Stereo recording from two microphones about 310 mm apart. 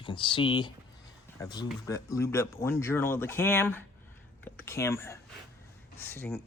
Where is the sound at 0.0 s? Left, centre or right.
Centre.